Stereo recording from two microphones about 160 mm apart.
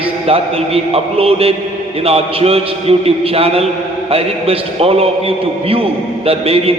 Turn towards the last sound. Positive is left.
turn(degrees=-40)  # may be behind; listen again after turning